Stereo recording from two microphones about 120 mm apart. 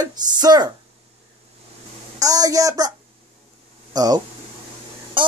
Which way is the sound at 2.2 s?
30° right (ahead or behind).